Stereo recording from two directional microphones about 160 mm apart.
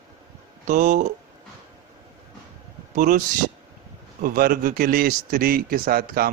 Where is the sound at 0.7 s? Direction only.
50° right (ahead or behind).